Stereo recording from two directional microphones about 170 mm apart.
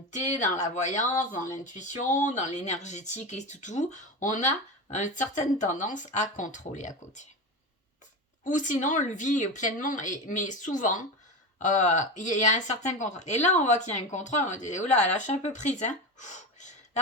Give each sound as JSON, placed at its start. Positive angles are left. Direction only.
{"t": 0.1, "sound": "speech", "side_deg": 45}
{"t": 8.4, "sound": "speech", "side_deg": 50}